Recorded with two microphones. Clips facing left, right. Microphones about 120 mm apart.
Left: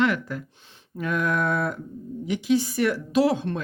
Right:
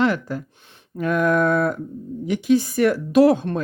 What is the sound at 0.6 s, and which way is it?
Speech, 55° right (ahead or behind).